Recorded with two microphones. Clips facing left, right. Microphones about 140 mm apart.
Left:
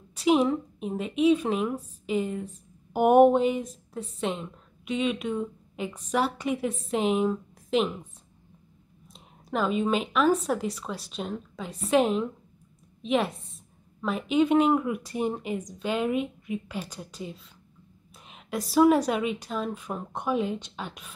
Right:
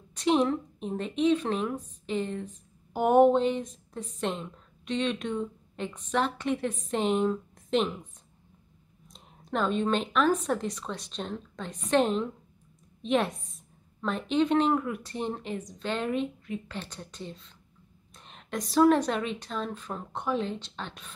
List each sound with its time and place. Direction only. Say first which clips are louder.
0.1 s a woman's voice: left 2 dB; 5° left (ahead or behind)
9.0 s a sound: left 1 dB; 5° left (ahead or behind)
10.4 s a woman's voice: left 1 dB; 5° left (ahead or behind)